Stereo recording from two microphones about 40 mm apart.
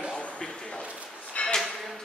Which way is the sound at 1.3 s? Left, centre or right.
Left.